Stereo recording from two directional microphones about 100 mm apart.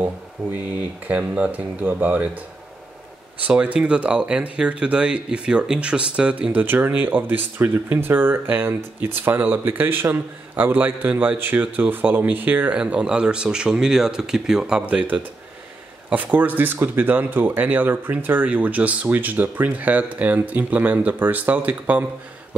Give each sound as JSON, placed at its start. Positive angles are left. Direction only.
{"t": 1.0, "sound": "speech", "side_deg": -15}
{"t": 3.4, "sound": "speech", "side_deg": -15}